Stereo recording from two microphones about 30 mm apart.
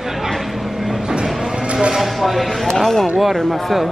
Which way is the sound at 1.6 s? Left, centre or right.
Right.